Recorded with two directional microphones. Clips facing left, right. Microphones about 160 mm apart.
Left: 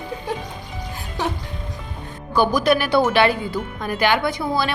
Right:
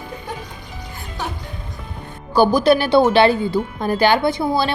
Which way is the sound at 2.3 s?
30° right (ahead or behind).